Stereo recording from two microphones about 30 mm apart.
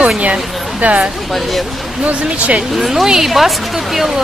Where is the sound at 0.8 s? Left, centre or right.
Right.